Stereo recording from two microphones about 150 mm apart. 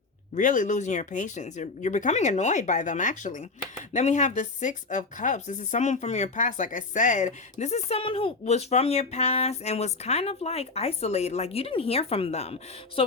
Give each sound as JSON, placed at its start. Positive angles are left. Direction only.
{"t": 0.3, "sound": "speech", "side_deg": 60}
{"t": 7.6, "sound": "speech", "side_deg": 45}
{"t": 13.0, "sound": "a sound", "side_deg": 40}